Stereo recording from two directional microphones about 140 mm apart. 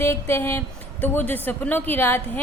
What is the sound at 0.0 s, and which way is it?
A woman's voice, 15° left (ahead or behind).